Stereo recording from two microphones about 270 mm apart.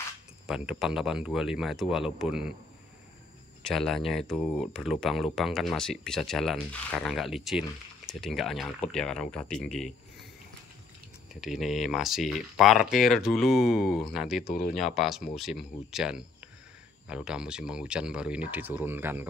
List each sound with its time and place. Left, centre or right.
0.5 s speech: centre
3.6 s speech: centre
11.4 s speech: centre
14.4 s speech: left
14.7 s speech: centre